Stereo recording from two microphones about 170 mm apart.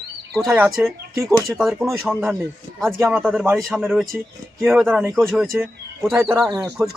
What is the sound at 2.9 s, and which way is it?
Speech, 10° right (ahead or behind).